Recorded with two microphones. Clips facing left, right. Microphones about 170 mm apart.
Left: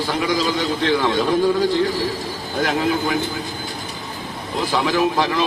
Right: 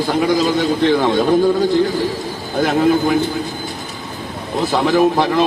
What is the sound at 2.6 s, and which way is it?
Speech, 50° right (ahead or behind).